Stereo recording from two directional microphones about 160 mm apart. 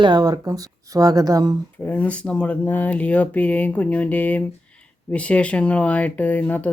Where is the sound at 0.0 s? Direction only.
25° right (ahead or behind).